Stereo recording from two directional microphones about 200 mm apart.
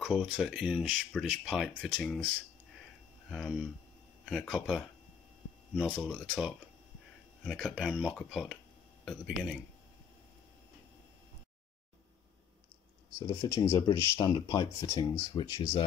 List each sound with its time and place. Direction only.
0.0 s speech: centre (ahead or behind)
3.3 s speech: centre (ahead or behind)
5.9 s speech: centre (ahead or behind)
13.3 s speech: 15° left (ahead or behind)